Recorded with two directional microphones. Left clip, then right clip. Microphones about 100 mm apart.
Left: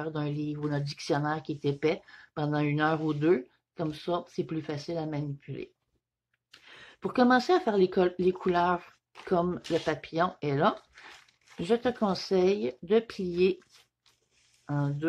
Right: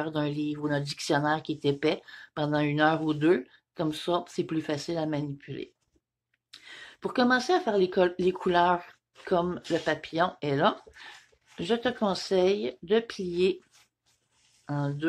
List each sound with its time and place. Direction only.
0.0 s speech: 25° left (ahead or behind)
6.5 s a sound: 25° left (ahead or behind)
7.2 s speech: 50° left (ahead or behind)
8.3 s speech: 30° left (ahead or behind)
14.7 s speech: 35° left (ahead or behind)